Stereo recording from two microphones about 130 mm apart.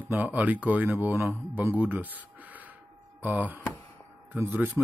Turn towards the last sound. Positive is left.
turn(degrees=-15)  # may be behind; listen again after turning